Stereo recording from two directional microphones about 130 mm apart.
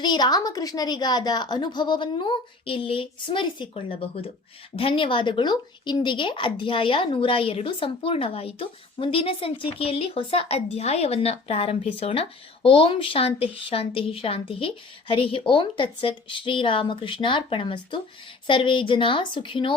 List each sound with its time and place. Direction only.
0.0 s a woman's voice: 30° left (ahead or behind)